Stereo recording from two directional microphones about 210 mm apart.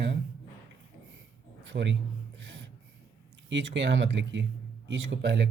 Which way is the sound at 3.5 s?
60° right (ahead or behind).